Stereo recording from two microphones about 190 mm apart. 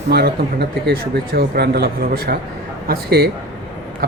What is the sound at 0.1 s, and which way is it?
A man's voice, 60° right (ahead or behind).